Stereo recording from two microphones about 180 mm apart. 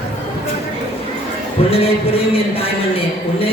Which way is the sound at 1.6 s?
35° left (ahead or behind).